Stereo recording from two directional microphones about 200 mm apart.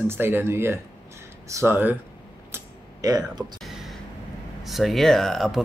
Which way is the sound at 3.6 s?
Centre (ahead or behind).